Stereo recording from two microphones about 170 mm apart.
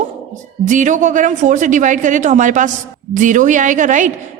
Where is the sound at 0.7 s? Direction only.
50° right (ahead or behind).